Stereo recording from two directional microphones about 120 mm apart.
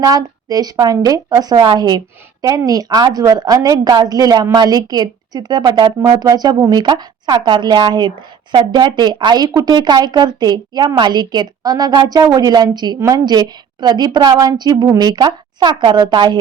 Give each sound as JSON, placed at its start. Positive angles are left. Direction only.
{"t": 0.0, "sound": "a woman's voice", "side_deg": -30}